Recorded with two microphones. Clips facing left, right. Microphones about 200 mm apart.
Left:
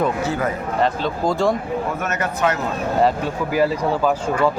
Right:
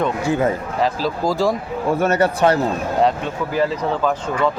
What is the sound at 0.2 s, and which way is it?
Speech, 15° right (ahead or behind).